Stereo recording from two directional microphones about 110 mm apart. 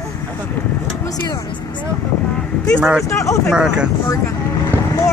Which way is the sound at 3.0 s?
30° left (ahead or behind).